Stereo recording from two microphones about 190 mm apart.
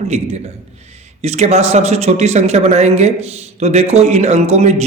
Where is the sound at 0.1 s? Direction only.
35° right (ahead or behind).